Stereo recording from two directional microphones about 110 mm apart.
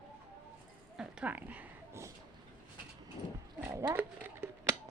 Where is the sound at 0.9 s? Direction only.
10° right (ahead or behind).